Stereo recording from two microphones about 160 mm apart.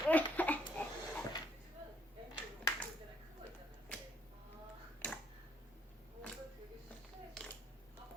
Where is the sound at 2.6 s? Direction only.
20° left (ahead or behind).